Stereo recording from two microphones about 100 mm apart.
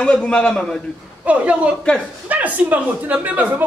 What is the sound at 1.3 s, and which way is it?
Speech, 15° right (ahead or behind).